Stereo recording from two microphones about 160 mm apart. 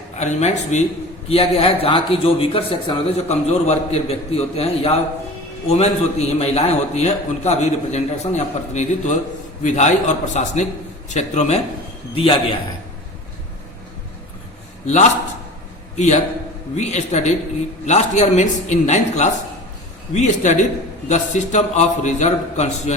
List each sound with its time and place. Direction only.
0.2 s a man's voice: 45° left (ahead or behind)
14.8 s a man's voice: 50° left (ahead or behind)